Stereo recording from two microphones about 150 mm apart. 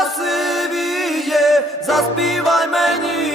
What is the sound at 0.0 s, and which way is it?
Music, centre (ahead or behind).